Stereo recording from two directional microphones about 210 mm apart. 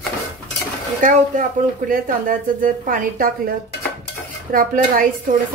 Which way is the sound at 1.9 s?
40° right (ahead or behind).